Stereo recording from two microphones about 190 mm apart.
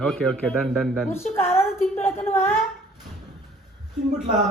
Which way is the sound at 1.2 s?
35° left (ahead or behind).